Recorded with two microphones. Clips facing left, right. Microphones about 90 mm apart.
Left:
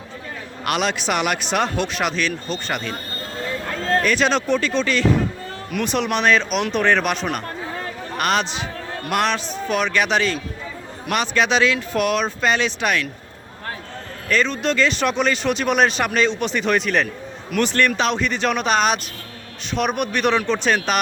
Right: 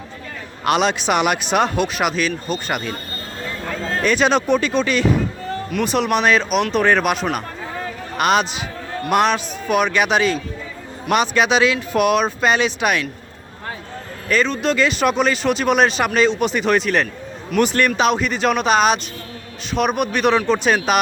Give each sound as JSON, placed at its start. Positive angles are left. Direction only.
{"t": 0.6, "sound": "speech", "side_deg": -20}
{"t": 4.0, "sound": "speech", "side_deg": -20}
{"t": 5.7, "sound": "speech", "side_deg": 0}
{"t": 14.3, "sound": "speech", "side_deg": -5}